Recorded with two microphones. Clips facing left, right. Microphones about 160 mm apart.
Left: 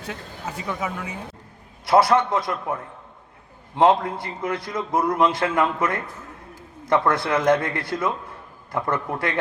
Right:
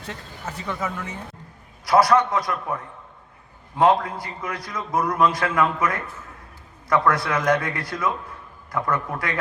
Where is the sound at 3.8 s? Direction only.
25° left (ahead or behind).